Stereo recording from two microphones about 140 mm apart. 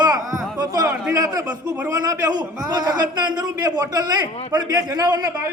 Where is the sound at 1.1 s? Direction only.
25° right (ahead or behind).